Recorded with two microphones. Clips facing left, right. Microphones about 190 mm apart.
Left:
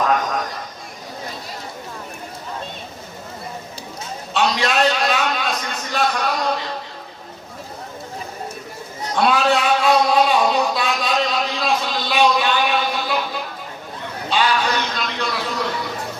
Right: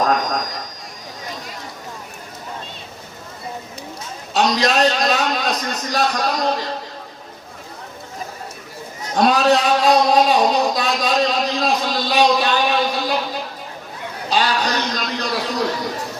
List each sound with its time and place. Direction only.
4.4 s a man's voice: 40° right (ahead or behind)
9.1 s music: 40° right (ahead or behind)
14.3 s a sound: 40° right (ahead or behind)